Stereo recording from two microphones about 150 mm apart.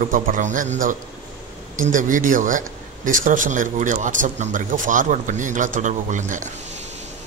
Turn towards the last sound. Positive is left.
turn(degrees=-55)  # may be behind; listen again after turning